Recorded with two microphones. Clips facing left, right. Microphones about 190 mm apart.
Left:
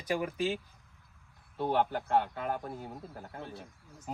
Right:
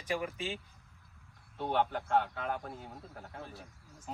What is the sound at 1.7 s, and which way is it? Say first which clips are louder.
Speech: left 1 dB; 5° left (ahead or behind).